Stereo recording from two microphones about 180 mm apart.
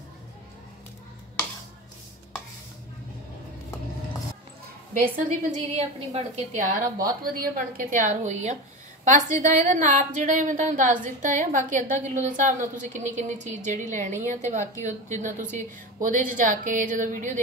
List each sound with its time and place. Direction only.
5.0 s a woman's voice: 50° right (ahead or behind)
5.8 s a woman's voice: 35° right (ahead or behind)